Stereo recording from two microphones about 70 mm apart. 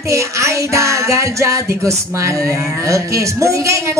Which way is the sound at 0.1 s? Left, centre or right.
Right.